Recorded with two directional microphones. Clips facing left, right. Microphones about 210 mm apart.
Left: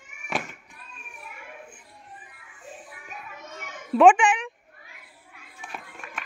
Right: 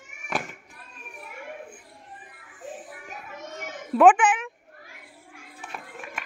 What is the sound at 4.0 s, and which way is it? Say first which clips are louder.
Speech: even; 5° right (ahead or behind).